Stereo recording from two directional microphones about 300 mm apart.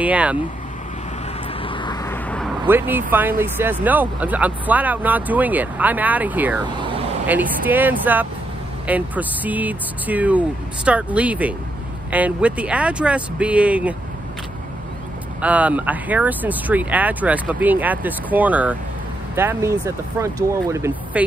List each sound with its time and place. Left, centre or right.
0.0 s speech: centre
1.6 s vehicle: centre
2.6 s speech: centre
15.4 s speech: centre